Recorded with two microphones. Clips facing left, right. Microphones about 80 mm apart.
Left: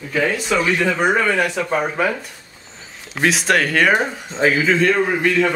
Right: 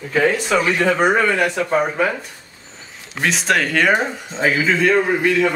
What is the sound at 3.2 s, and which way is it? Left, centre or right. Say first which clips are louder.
Speech: left 1 dB; centre.